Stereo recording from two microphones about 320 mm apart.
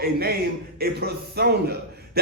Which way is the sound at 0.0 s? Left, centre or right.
Right.